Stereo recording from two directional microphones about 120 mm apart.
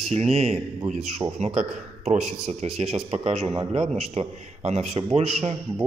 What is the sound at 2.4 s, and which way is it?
A man's voice, 60° right (ahead or behind).